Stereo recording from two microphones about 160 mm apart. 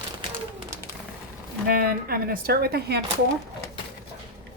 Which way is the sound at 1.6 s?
70° right (ahead or behind).